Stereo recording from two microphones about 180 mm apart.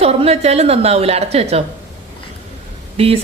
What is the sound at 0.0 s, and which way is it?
A woman's voice, 35° right (ahead or behind).